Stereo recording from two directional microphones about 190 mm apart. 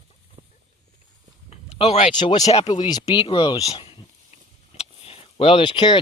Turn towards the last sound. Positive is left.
turn(degrees=25)  # may be behind; listen again after turning